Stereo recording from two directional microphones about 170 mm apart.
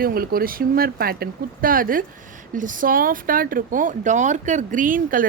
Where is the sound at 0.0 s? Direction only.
60° right (ahead or behind).